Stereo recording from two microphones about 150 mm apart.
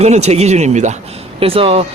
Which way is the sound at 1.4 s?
40° right (ahead or behind).